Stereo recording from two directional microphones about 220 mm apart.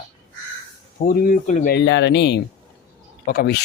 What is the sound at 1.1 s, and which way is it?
Speech, 40° left (ahead or behind).